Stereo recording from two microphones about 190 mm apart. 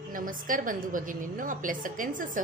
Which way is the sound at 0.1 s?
45° right (ahead or behind).